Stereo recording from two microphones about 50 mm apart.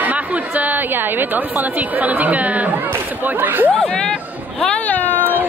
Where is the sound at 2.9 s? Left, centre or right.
Right.